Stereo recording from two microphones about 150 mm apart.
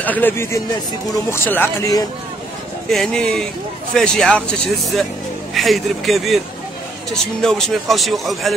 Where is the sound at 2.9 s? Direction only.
5° left (ahead or behind).